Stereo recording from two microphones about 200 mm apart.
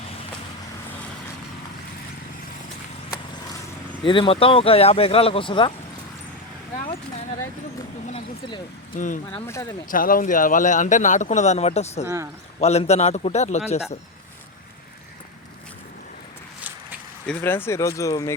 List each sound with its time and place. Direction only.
4.0 s speech: 25° left (ahead or behind)
9.0 s speech: 40° left (ahead or behind)
9.5 s speech: 15° left (ahead or behind)
9.9 s speech: 45° left (ahead or behind)
12.0 s speech: 15° right (ahead or behind)
12.5 s speech: 30° left (ahead or behind)
17.2 s speech: 10° left (ahead or behind)